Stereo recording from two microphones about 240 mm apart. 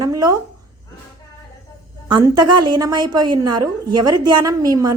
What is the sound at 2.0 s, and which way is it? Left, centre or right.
A woman's voice, centre.